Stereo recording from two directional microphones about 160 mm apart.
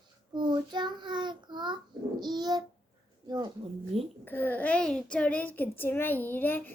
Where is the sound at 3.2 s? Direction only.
25° right (ahead or behind).